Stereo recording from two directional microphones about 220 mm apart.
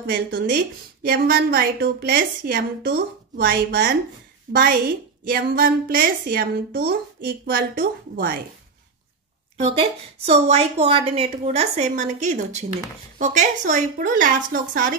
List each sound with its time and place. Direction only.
0.0 s a woman's voice: 45° right (ahead or behind)
9.6 s a woman's voice: 25° right (ahead or behind)